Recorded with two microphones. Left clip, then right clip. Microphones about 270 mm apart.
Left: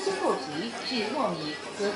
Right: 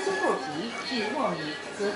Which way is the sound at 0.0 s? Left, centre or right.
Centre.